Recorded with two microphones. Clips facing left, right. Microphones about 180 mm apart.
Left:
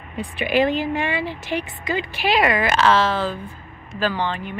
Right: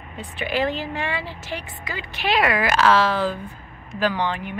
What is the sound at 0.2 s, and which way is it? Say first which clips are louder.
Speech: left 5 dB; 15° left (ahead or behind).